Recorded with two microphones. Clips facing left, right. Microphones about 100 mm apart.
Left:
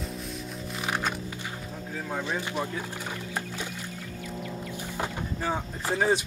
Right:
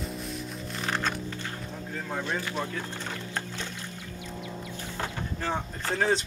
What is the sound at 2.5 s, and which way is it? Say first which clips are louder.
Boat: left 1 dB; 10° left (ahead or behind).